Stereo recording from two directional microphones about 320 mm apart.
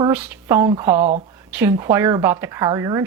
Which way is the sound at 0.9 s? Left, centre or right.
Right.